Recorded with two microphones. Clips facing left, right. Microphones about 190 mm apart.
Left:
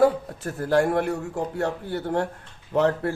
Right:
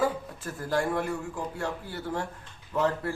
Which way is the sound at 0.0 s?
65° left (ahead or behind).